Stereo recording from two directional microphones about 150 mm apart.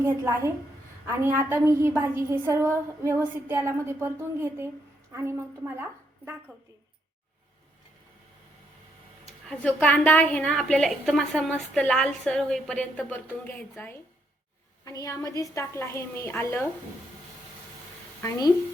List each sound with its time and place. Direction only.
0.0 s a woman's voice: 20° right (ahead or behind)
9.5 s a woman's voice: 10° left (ahead or behind)
18.2 s speech: 25° left (ahead or behind)